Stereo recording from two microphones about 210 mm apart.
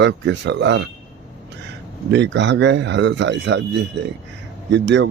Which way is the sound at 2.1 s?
55° right (ahead or behind).